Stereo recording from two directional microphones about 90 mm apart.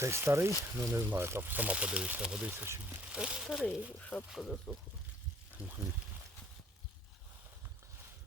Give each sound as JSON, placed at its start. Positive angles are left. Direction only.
{"t": 0.0, "sound": "speech", "side_deg": -30}
{"t": 2.5, "sound": "speech", "side_deg": -25}
{"t": 2.8, "sound": "speech", "side_deg": -10}
{"t": 3.5, "sound": "speech", "side_deg": 5}
{"t": 4.5, "sound": "speech", "side_deg": 10}